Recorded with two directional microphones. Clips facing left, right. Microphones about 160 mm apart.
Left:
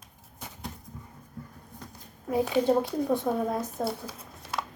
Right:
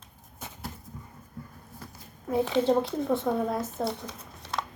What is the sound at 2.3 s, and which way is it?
Speech, 10° left (ahead or behind).